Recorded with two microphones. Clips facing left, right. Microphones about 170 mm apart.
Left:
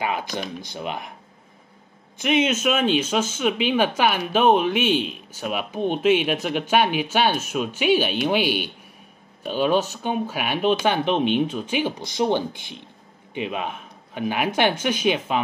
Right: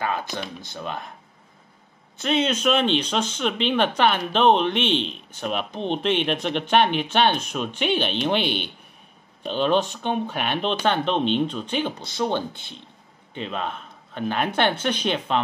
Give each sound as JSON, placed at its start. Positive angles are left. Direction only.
{"t": 0.0, "sound": "speech", "side_deg": 15}
{"t": 2.2, "sound": "speech", "side_deg": 10}